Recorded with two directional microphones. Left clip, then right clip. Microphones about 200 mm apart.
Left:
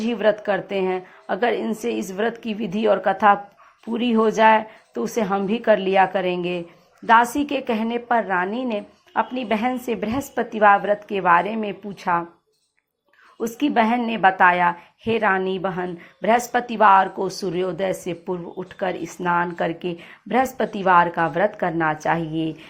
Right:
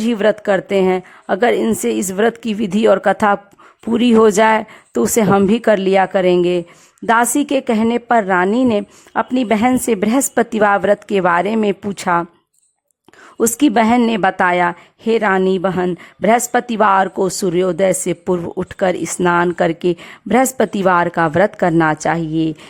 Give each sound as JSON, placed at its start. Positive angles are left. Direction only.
{"t": 0.0, "sound": "speech", "side_deg": -45}
{"t": 13.4, "sound": "speech", "side_deg": -45}